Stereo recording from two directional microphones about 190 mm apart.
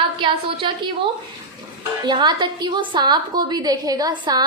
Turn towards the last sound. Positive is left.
turn(degrees=-20)  # may be behind; listen again after turning